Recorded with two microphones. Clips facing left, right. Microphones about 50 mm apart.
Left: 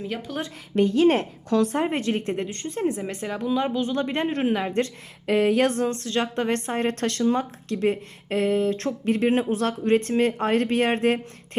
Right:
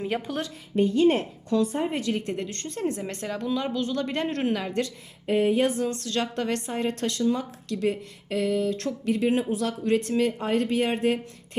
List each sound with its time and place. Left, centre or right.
0.0 s speech: right
0.8 s a woman's voice: left
1.9 s a woman's voice: left
2.5 s speech: centre
5.2 s a sound: left
5.8 s speech: left
6.7 s speech: left
7.3 s speech: left